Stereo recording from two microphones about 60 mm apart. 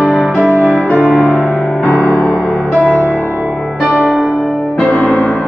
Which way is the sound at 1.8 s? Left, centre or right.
Left.